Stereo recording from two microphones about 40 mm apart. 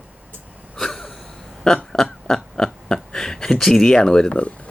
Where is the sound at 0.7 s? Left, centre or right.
Centre.